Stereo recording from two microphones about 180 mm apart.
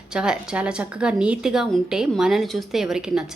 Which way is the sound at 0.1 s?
5° right (ahead or behind).